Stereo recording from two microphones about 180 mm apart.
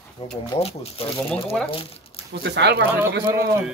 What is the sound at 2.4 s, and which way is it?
Speech, 70° right (ahead or behind).